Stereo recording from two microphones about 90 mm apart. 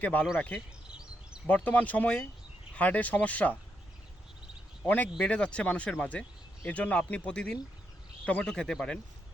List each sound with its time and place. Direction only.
0.0 s speech: 20° left (ahead or behind)
0.5 s a sound: 10° right (ahead or behind)
1.5 s speech: 15° left (ahead or behind)
4.8 s speech: 15° left (ahead or behind)